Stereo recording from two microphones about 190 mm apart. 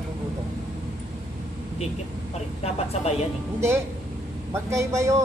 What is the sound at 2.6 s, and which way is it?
Speech, 35° left (ahead or behind).